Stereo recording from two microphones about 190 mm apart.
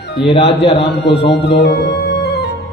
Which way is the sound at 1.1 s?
65° left (ahead or behind).